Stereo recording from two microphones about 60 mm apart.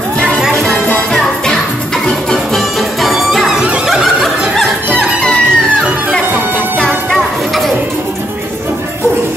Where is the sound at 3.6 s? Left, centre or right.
Centre.